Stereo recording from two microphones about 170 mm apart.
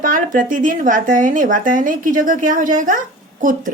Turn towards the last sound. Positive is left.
turn(degrees=-50)  # may be behind; listen again after turning